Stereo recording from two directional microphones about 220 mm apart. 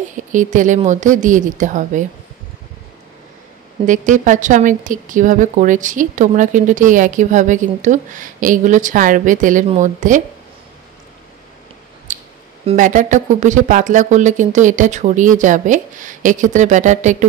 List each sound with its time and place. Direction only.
0.1 s a woman's voice: 35° right (ahead or behind)
3.8 s a woman's voice: 35° right (ahead or behind)
12.1 s music: 35° right (ahead or behind)
12.6 s a woman's voice: 35° right (ahead or behind)